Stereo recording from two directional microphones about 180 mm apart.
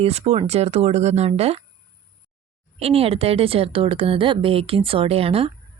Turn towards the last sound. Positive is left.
turn(degrees=-30)  # may be behind; listen again after turning